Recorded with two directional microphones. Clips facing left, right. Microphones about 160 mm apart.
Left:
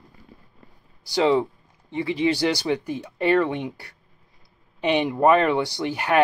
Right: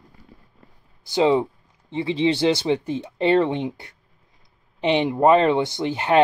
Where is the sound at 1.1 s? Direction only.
20° right (ahead or behind).